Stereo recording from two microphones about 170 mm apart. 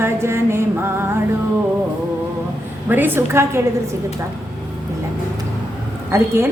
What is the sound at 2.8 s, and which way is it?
Speech, 10° right (ahead or behind).